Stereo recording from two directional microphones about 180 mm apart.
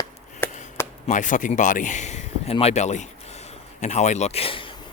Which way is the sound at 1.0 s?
45° left (ahead or behind).